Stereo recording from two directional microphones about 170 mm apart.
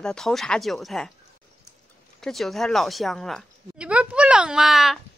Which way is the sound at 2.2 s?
Centre (ahead or behind).